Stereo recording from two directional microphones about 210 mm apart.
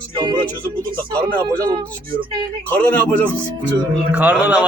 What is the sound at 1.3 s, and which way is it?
Speech, 5° left (ahead or behind).